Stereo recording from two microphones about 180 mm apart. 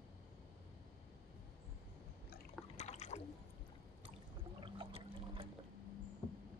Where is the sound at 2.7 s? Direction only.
40° left (ahead or behind).